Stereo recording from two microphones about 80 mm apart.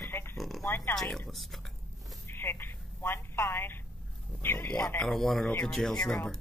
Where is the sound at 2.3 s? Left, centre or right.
Left.